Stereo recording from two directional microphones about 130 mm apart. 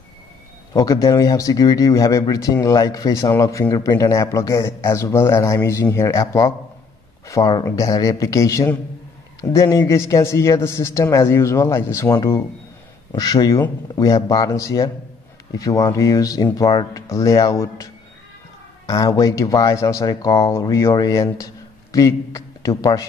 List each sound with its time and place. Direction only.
0.7 s a man's voice: 30° left (ahead or behind)
18.9 s a man's voice: 30° left (ahead or behind)